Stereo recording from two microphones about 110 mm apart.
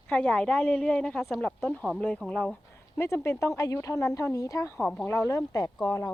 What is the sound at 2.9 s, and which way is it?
Speech, 25° left (ahead or behind).